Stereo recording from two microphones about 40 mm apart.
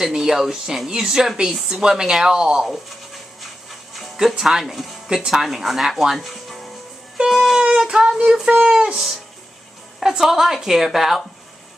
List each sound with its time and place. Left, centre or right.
0.1 s speech: centre
4.2 s speech: centre
6.1 s music: centre
7.6 s child singing: right
8.6 s speech: right
8.9 s speech: centre